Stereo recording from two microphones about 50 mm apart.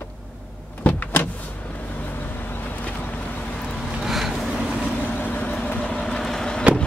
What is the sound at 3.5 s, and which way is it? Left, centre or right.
Vehicle, centre.